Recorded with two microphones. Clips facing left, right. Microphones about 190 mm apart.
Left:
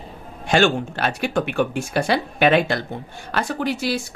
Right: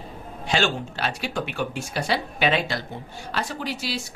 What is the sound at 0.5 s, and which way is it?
Speech, 55° left (ahead or behind).